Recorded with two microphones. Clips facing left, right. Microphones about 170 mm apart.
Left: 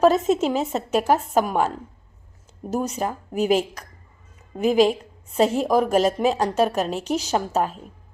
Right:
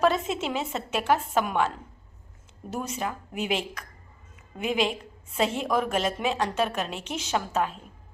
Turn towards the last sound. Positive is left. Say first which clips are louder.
# left 4 dB
turn(degrees=40)  # may be behind; listen again after turning